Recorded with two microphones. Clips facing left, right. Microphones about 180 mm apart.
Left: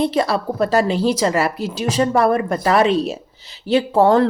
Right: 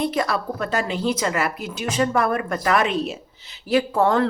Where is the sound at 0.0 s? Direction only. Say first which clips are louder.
Left 5 dB; 30° left (ahead or behind).